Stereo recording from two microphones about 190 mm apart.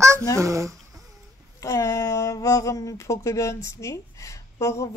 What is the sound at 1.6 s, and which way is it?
Speech, 15° left (ahead or behind).